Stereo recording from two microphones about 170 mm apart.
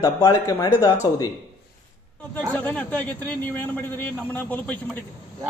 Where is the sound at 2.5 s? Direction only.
10° left (ahead or behind).